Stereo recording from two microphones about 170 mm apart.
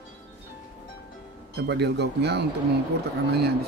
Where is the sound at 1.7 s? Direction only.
85° right.